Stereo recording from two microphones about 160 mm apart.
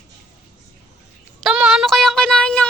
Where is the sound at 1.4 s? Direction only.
5° right (ahead or behind).